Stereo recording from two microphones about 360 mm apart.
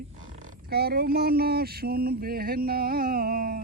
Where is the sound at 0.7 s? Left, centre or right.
Right.